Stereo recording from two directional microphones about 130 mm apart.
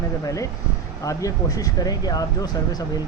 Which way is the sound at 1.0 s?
25° left (ahead or behind).